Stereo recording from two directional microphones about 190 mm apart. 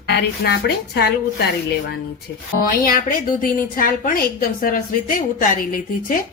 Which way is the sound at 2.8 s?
45° left (ahead or behind).